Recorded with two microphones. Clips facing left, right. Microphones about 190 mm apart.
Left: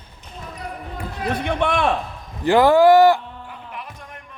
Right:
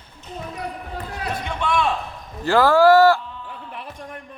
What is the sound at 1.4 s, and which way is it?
Speech, 60° left (ahead or behind).